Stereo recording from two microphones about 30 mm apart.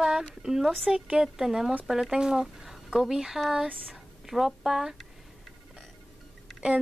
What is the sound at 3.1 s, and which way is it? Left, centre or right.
Speech, centre.